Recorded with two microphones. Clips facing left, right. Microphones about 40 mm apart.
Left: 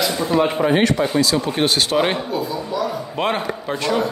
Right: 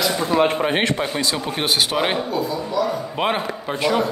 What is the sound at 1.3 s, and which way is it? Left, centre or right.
A man's voice, centre.